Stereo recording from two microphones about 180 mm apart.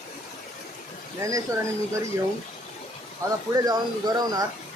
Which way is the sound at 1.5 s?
20° right (ahead or behind).